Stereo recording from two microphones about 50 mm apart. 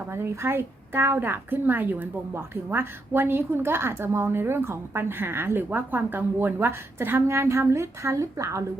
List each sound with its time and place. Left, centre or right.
0.1 s a woman's voice: right
7.3 s speech: right